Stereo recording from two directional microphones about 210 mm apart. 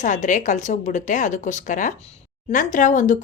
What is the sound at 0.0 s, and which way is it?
Speech, 35° left (ahead or behind).